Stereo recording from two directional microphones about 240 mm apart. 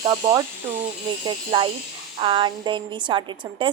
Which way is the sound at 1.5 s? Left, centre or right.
Centre.